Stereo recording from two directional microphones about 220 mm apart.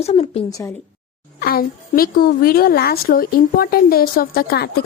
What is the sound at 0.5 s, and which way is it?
Speech, 15° left (ahead or behind).